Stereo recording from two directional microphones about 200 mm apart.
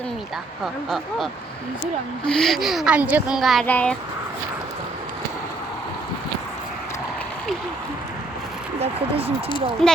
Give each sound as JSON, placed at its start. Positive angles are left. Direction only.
{"t": 0.6, "sound": "speech", "side_deg": 0}
{"t": 8.8, "sound": "speech", "side_deg": -30}
{"t": 9.8, "sound": "speech", "side_deg": 0}